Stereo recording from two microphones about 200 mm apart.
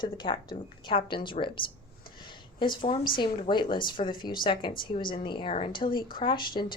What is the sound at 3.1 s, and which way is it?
A woman's voice, 25° left (ahead or behind).